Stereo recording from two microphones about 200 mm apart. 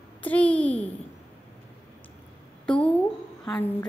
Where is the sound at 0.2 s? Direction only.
5° left (ahead or behind).